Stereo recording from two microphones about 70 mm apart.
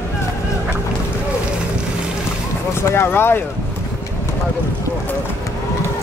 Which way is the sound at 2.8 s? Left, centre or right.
Left.